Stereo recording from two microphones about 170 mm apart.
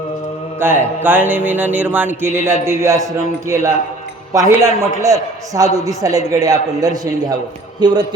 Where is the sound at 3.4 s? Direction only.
20° right (ahead or behind).